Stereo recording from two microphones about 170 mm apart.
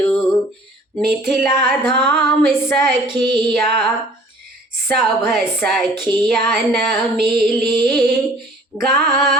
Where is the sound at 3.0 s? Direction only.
25° right (ahead or behind).